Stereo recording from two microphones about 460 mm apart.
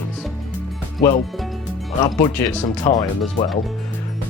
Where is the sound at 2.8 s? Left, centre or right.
Centre.